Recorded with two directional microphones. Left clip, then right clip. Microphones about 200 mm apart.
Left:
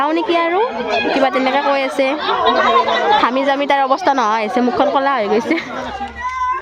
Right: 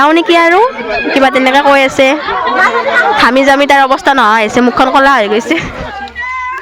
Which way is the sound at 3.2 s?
10° right (ahead or behind).